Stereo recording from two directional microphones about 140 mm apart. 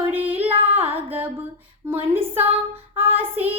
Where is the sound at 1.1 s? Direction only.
15° right (ahead or behind).